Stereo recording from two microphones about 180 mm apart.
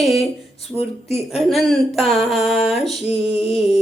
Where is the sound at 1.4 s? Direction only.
Centre (ahead or behind).